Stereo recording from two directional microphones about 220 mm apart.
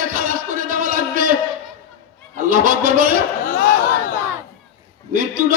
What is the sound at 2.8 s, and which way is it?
Speech, 40° right (ahead or behind).